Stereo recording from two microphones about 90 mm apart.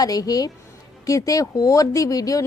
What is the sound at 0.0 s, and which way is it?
A woman's voice, 45° left (ahead or behind).